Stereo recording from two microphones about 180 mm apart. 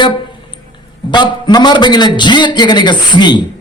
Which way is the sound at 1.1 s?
25° left (ahead or behind).